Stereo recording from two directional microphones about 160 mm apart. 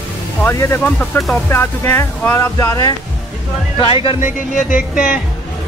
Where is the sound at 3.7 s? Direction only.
30° left (ahead or behind).